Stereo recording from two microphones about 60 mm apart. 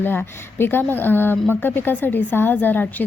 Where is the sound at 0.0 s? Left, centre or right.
Left.